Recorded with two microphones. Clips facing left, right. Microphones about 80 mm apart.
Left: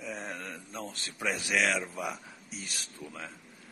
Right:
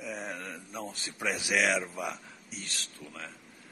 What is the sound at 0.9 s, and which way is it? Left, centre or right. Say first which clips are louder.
Speech: right 1 dB; centre.